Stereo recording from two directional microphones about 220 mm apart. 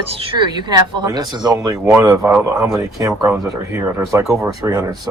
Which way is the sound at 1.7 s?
10° right (ahead or behind).